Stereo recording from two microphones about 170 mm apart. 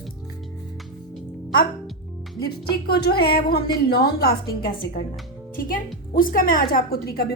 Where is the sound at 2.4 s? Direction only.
70° left (ahead or behind).